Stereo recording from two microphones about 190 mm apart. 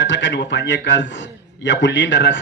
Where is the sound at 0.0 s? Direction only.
70° left (ahead or behind).